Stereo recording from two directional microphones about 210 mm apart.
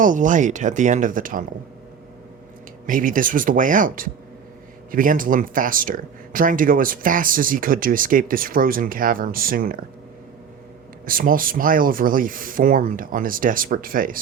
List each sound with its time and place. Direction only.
0.0 s speech: 40° right (ahead or behind)
2.8 s speech: 40° right (ahead or behind)
11.0 s speech: 40° right (ahead or behind)